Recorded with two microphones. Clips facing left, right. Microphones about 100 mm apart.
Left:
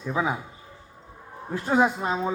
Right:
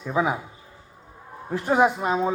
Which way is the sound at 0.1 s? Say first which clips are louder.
Right 3 dB; 15° right (ahead or behind).